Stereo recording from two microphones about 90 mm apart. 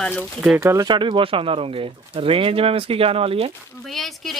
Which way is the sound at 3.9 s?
Centre (ahead or behind).